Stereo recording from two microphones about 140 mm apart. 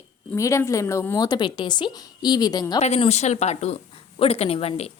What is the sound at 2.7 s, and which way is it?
A woman's voice, 50° left (ahead or behind).